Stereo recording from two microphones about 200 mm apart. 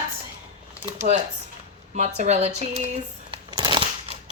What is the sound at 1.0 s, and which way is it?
Speech, 35° right (ahead or behind).